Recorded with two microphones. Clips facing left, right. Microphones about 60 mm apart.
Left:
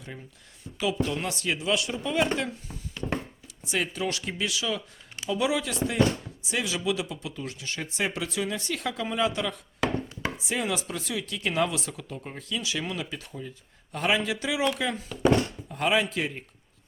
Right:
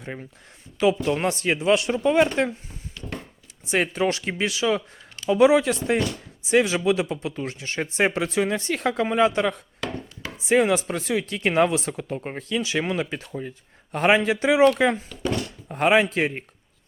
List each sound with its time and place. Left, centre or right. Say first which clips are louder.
0.0 s speech: right 7 dB; right
6.0 s speech: left 3 dB; left
6.4 s speech: right 10 dB; right
15.3 s thunk: left 4 dB; left
15.7 s speech: right 6 dB; right